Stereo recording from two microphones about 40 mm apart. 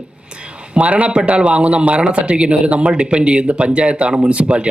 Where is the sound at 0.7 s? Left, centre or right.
Right.